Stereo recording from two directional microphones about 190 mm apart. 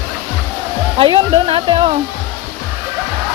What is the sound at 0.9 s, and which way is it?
Speech, 30° right (ahead or behind).